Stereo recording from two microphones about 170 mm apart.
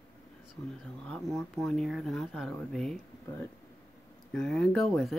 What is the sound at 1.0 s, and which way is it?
Speech, 5° left (ahead or behind).